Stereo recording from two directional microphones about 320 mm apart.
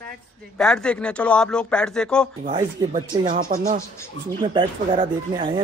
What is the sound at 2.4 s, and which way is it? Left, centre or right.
Speech, centre.